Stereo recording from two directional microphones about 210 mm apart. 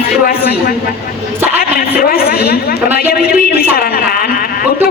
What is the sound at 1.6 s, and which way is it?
A woman's voice, 45° left (ahead or behind).